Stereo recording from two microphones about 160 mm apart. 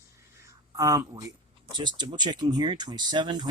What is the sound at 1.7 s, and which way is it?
Speech, 30° right (ahead or behind).